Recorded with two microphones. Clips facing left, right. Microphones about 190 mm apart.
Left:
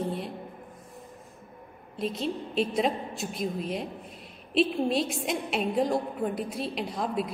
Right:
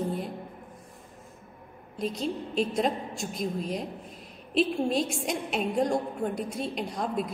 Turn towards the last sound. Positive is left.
turn(degrees=0)  # may be behind; listen again after turning